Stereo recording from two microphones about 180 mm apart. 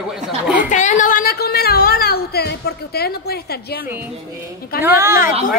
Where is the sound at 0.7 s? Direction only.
45° left (ahead or behind); by 3.6 s 60° left (ahead or behind).